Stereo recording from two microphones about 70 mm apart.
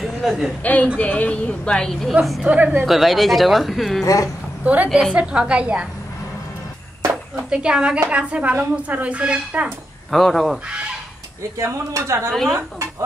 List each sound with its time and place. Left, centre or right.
0.0 s a sound: centre
0.9 s a woman's voice: left
2.4 s speech: right
2.8 s speech: centre
4.0 s speech: left
4.6 s a woman's voice: centre
7.3 s a woman's voice: centre
10.1 s speech: centre
11.5 s speech: right
12.3 s speech: centre